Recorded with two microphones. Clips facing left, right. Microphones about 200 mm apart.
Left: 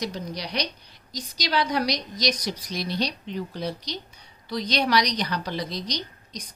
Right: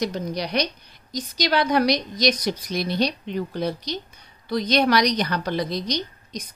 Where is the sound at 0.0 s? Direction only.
50° right (ahead or behind).